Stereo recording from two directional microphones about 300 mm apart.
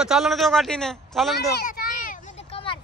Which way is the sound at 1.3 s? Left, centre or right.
Left.